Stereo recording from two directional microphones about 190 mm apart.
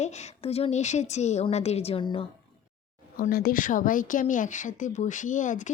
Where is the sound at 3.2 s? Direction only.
50° left (ahead or behind).